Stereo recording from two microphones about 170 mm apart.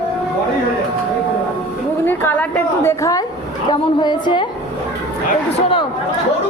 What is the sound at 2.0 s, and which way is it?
A woman's voice, 10° left (ahead or behind).